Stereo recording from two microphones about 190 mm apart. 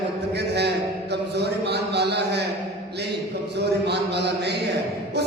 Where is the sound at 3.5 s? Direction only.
60° right (ahead or behind).